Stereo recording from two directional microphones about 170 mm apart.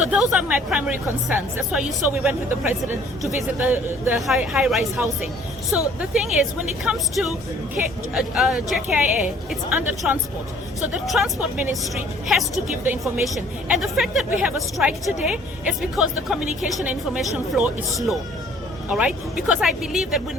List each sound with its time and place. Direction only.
0.0 s a woman's voice: 5° right (ahead or behind)